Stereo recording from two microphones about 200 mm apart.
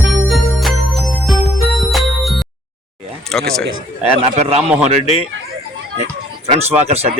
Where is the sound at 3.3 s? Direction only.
5° left (ahead or behind).